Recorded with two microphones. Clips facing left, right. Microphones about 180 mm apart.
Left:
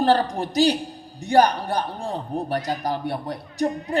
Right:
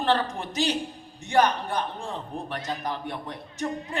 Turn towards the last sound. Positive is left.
turn(degrees=35)  # may be behind; listen again after turning